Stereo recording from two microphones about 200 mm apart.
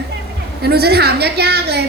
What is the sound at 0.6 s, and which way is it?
A woman's voice, 50° right (ahead or behind).